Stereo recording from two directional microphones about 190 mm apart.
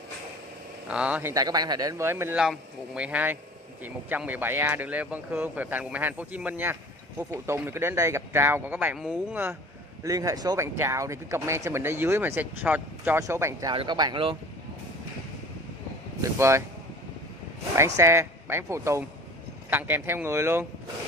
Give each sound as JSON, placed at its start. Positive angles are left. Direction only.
{"t": 0.8, "sound": "speech", "side_deg": -5}
{"t": 1.3, "sound": "speech", "side_deg": -20}
{"t": 16.2, "sound": "speech", "side_deg": -15}
{"t": 17.7, "sound": "speech", "side_deg": -15}